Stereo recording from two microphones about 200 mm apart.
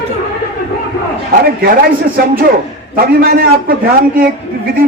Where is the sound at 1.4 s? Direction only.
50° right (ahead or behind).